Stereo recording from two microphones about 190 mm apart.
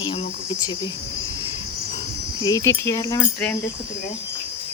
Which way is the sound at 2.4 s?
15° left (ahead or behind).